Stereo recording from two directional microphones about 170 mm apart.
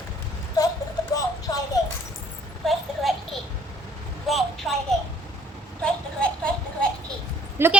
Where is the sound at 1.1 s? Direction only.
20° left (ahead or behind).